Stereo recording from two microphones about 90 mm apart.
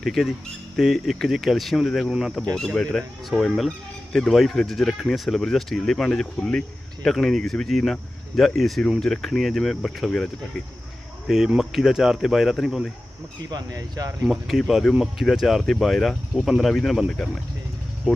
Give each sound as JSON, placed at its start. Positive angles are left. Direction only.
{"t": 0.0, "sound": "speech", "side_deg": 0}
{"t": 11.3, "sound": "speech", "side_deg": -5}
{"t": 13.5, "sound": "speech", "side_deg": -45}
{"t": 14.2, "sound": "speech", "side_deg": -5}